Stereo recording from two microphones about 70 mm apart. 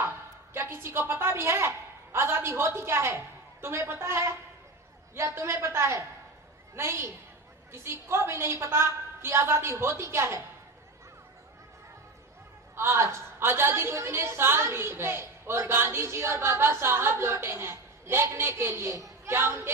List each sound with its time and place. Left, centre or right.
0.5 s a woman's voice: right
12.7 s a woman's voice: right
19.2 s a woman's voice: right